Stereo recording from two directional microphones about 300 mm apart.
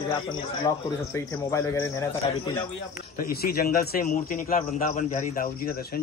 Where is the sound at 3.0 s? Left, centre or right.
Left.